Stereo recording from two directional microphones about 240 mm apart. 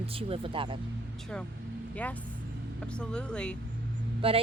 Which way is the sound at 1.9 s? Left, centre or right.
Centre.